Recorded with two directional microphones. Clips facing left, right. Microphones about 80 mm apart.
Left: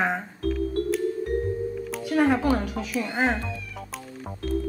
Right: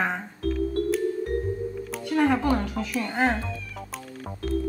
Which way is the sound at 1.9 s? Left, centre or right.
Centre.